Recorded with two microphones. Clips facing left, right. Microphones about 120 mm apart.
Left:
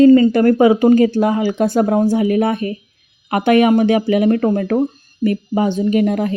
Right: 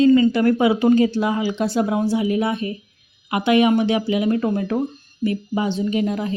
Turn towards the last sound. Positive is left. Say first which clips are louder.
# left 6 dB
turn(degrees=55)  # may be behind; listen again after turning